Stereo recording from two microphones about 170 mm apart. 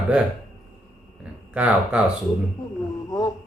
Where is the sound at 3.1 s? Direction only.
20° left (ahead or behind).